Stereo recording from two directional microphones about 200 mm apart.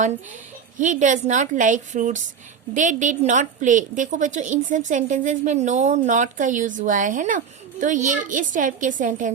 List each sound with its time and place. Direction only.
0.8 s a woman's voice: 40° right (ahead or behind)